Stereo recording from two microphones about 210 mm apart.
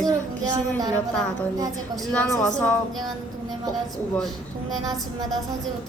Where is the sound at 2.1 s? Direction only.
5° left (ahead or behind).